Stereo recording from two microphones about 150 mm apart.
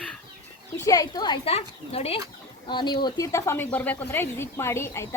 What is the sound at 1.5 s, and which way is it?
Speech, 40° left (ahead or behind).